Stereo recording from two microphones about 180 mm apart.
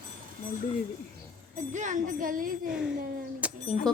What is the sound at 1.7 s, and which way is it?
Music, 45° right (ahead or behind).